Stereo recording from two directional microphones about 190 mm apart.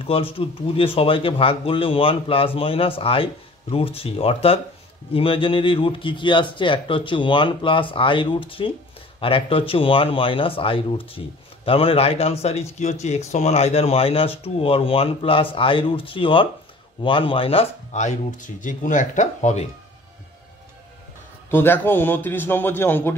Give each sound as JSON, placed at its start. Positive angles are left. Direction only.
{"t": 0.0, "sound": "speech", "side_deg": 30}
{"t": 21.5, "sound": "a man's voice", "side_deg": 10}